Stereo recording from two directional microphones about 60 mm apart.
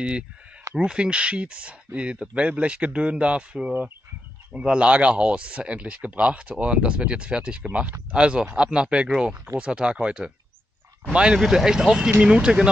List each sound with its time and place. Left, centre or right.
0.7 s speech: centre